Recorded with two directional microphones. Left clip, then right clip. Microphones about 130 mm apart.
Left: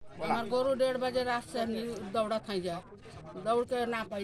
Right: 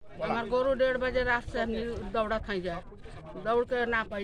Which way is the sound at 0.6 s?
5° right (ahead or behind).